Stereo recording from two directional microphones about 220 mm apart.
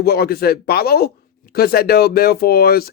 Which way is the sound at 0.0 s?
45° left (ahead or behind).